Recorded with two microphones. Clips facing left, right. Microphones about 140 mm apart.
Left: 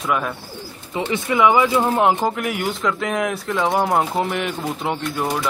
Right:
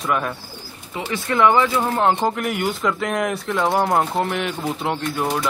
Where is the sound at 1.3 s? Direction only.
10° left (ahead or behind).